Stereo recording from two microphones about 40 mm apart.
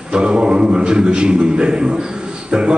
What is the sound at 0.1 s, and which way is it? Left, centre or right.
A man's voice, right.